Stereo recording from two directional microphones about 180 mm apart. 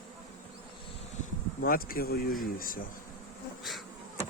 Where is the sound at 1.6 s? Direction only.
55° left (ahead or behind).